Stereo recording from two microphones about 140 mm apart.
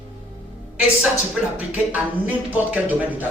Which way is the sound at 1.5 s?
10° right (ahead or behind).